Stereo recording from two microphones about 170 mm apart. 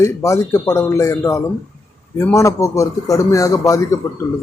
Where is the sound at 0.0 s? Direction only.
15° left (ahead or behind).